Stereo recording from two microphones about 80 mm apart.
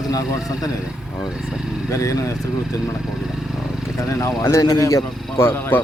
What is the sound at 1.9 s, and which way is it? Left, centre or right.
Speech, left.